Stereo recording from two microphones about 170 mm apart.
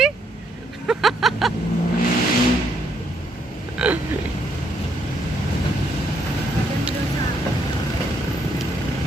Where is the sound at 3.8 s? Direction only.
5° right (ahead or behind).